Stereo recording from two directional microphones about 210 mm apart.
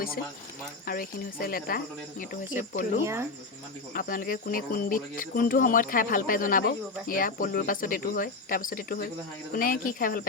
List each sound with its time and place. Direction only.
0.9 s speech: 45° left (ahead or behind)
3.0 s speech: 15° right (ahead or behind)
3.9 s speech: 40° left (ahead or behind)